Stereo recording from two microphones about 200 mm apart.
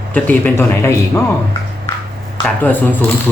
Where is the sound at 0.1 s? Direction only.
10° left (ahead or behind).